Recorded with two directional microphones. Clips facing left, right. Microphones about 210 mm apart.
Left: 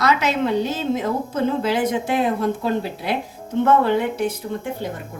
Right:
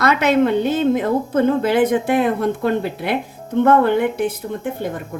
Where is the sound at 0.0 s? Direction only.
55° right (ahead or behind).